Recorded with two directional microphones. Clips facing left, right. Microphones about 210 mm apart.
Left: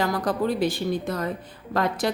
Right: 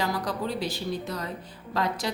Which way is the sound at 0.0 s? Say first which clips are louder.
Left 5 dB; 50° left (ahead or behind).